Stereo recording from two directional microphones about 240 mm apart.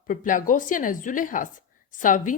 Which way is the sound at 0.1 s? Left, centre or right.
Left.